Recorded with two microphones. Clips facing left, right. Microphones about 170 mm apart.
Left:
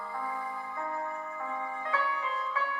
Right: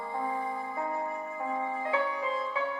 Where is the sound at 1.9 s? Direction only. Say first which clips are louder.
Right 2 dB; 25° right (ahead or behind).